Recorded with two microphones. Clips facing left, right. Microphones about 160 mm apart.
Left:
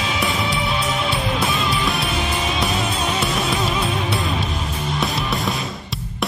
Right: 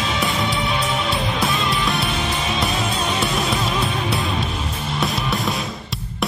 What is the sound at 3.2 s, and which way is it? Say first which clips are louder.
Music: even; centre (ahead or behind).